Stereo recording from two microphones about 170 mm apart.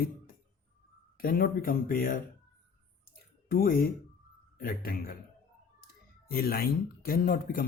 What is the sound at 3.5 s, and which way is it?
Speech, 60° left (ahead or behind).